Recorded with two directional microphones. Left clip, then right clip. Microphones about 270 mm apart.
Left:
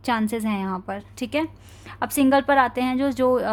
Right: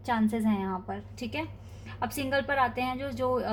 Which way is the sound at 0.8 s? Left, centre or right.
Left.